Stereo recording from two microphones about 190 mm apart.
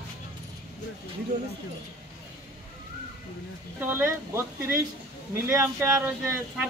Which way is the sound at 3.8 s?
10° right (ahead or behind).